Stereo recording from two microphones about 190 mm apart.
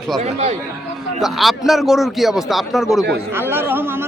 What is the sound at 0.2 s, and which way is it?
Speech, 35° right (ahead or behind).